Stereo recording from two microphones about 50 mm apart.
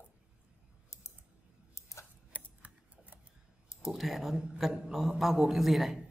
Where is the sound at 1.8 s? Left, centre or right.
Left.